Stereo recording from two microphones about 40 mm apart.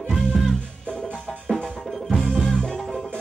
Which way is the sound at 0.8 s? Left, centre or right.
Left.